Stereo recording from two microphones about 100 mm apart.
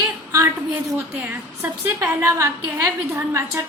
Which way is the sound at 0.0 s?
30° right (ahead or behind).